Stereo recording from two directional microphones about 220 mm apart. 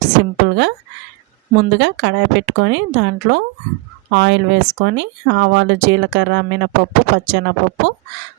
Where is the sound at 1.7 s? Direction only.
55° right (ahead or behind).